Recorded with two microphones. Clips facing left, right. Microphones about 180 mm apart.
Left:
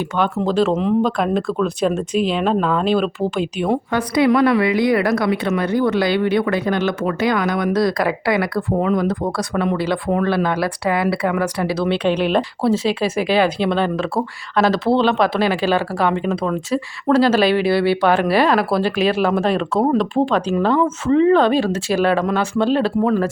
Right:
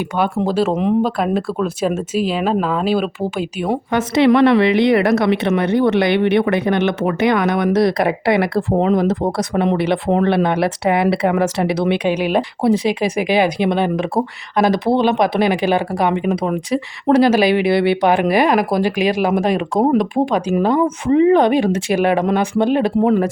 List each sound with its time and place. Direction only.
0.0 s speech: 10° right (ahead or behind)
3.9 s speech: 25° right (ahead or behind)